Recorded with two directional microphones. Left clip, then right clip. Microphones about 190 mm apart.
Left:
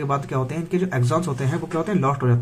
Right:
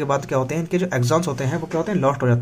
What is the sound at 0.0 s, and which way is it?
Speech, 35° right (ahead or behind).